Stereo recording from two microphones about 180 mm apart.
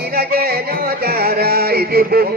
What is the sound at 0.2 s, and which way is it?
Music, 55° right (ahead or behind).